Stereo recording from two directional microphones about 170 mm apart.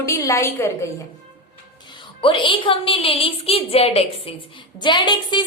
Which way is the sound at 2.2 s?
30° left (ahead or behind).